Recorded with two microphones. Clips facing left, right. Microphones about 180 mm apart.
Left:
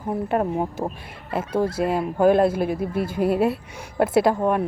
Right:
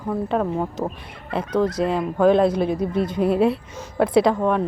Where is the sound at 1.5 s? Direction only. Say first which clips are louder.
Right 2 dB; 25° left (ahead or behind).